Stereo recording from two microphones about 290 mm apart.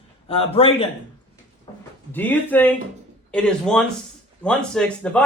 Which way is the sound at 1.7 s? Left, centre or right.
Centre.